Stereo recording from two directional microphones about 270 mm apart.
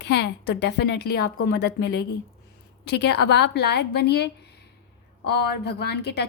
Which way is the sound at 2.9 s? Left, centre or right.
Left.